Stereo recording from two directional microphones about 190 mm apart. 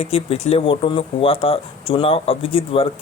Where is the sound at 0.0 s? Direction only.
30° left (ahead or behind).